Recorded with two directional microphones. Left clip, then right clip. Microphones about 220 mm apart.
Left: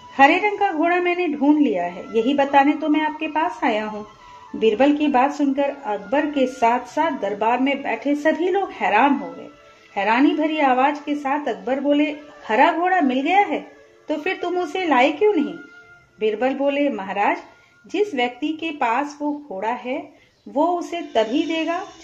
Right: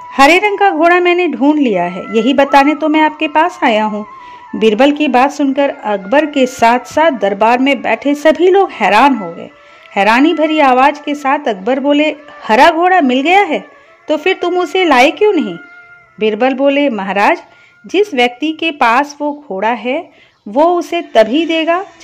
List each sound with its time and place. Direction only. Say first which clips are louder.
0.1 s speech: right 7 dB; 50° right (ahead or behind)